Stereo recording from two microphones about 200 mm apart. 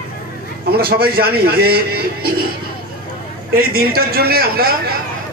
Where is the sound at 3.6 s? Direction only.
50° right (ahead or behind).